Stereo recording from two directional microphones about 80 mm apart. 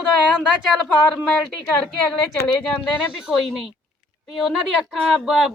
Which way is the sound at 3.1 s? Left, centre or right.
Centre.